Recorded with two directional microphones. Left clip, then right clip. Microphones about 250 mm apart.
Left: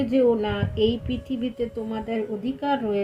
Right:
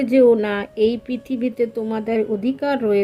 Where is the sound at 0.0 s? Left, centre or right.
Right.